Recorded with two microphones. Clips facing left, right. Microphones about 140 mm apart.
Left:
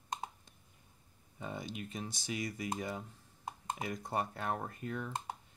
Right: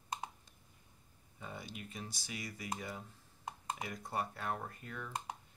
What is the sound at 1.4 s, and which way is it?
Speech, 20° left (ahead or behind).